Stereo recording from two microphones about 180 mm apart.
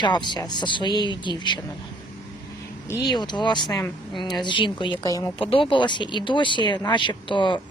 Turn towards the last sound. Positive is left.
turn(degrees=25)  # may be behind; listen again after turning